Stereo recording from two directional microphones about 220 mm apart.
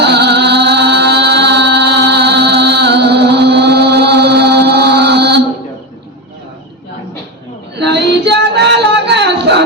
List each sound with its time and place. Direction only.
0.0 s music: 50° right (ahead or behind)
7.8 s child singing: 50° right (ahead or behind)